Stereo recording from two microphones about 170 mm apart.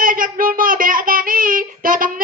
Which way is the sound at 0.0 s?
55° right (ahead or behind).